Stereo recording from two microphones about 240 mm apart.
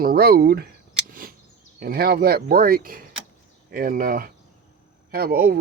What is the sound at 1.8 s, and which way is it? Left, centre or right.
Speech, right.